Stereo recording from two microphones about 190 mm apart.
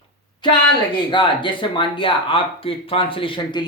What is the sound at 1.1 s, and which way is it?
Speech, 25° left (ahead or behind).